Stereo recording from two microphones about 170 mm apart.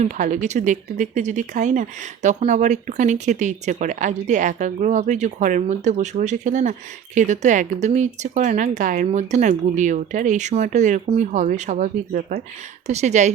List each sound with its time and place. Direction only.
0.0 s speech: 45° right (ahead or behind)